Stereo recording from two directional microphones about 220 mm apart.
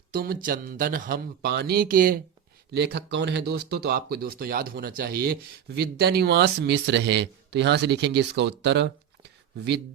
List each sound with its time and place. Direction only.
0.1 s speech: 40° right (ahead or behind)